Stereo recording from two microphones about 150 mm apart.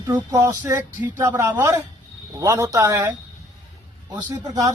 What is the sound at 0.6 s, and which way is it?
Speech, 15° right (ahead or behind).